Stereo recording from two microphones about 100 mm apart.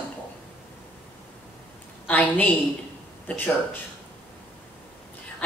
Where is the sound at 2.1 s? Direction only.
15° left (ahead or behind).